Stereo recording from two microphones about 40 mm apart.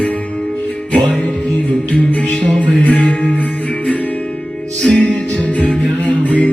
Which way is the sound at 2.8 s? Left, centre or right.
Left.